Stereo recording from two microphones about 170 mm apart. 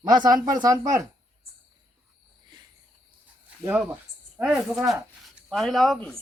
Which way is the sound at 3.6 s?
10° right (ahead or behind).